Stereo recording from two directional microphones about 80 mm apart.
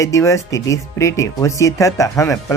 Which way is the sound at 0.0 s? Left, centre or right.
Left.